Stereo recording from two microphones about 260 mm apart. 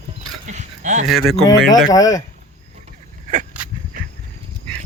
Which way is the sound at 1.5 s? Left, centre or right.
Centre.